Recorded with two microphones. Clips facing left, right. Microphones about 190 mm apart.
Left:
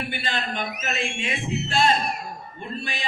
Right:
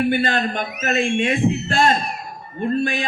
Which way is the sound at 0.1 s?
50° right (ahead or behind).